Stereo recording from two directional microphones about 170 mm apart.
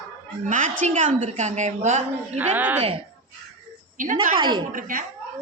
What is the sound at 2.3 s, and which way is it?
Speech, 10° right (ahead or behind).